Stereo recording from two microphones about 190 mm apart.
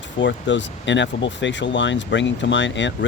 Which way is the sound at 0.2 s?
70° left (ahead or behind).